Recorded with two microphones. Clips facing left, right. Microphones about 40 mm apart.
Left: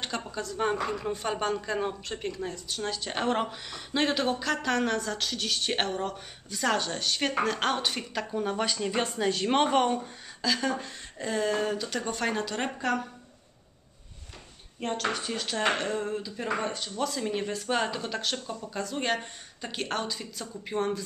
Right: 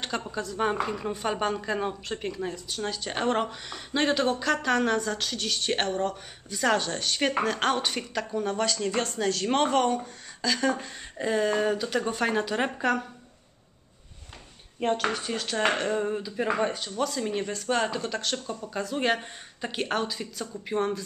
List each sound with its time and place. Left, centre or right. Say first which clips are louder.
0.0 s a woman's voice: right 2 dB; centre
10.0 s a sound: right 1 dB; centre
11.1 s speech: right 3 dB; centre
14.8 s a woman's voice: right 4 dB; centre